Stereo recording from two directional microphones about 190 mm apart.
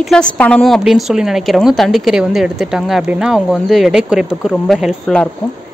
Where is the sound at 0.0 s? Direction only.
5° left (ahead or behind).